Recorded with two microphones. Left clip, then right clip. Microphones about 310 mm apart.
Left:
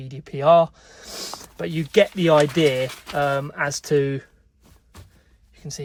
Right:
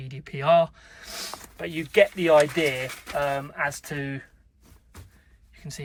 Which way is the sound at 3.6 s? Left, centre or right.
Left.